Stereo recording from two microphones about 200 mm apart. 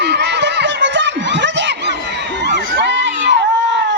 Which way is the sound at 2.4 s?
60° right (ahead or behind).